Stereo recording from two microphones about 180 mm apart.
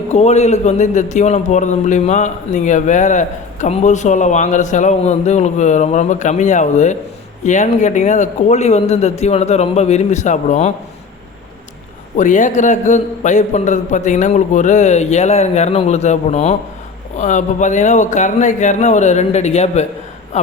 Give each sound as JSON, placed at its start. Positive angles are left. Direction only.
{"t": 0.1, "sound": "a man's voice", "side_deg": 35}
{"t": 12.1, "sound": "a man's voice", "side_deg": 45}